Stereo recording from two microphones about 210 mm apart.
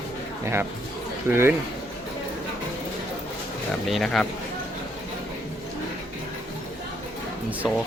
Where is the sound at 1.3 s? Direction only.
10° right (ahead or behind).